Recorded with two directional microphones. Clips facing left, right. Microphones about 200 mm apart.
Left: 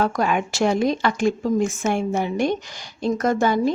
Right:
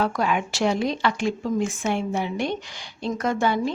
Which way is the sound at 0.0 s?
45° left (ahead or behind).